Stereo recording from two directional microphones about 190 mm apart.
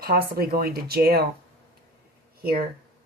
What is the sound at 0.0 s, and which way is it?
Speech, 50° right (ahead or behind).